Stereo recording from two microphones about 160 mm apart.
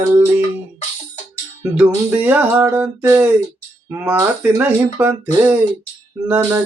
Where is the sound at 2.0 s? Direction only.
10° right (ahead or behind).